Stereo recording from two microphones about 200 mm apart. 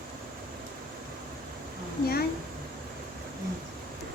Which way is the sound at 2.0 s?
50° left (ahead or behind).